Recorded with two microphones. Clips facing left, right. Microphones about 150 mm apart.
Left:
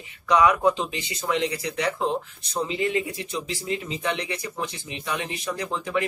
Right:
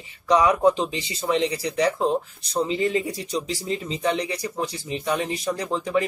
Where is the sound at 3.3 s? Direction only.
35° right (ahead or behind).